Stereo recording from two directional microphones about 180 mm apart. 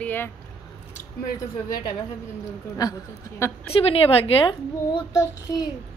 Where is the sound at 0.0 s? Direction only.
10° left (ahead or behind).